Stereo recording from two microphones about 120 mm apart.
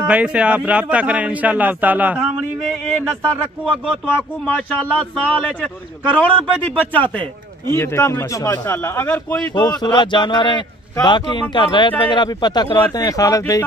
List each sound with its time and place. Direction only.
0.0 s a man's voice: 10° right (ahead or behind)
4.9 s a man's voice: 5° left (ahead or behind)
9.6 s a man's voice: 35° left (ahead or behind)